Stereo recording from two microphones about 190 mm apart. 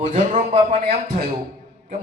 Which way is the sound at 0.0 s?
35° right (ahead or behind).